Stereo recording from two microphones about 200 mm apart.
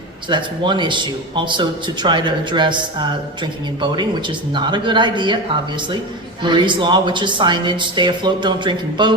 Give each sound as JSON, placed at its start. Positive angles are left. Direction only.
{"t": 0.3, "sound": "speech", "side_deg": -25}
{"t": 6.4, "sound": "speech", "side_deg": -25}